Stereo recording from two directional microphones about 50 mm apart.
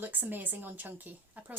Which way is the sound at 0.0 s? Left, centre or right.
Right.